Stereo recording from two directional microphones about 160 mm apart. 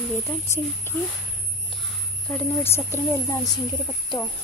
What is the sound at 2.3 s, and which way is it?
Speech, 10° left (ahead or behind).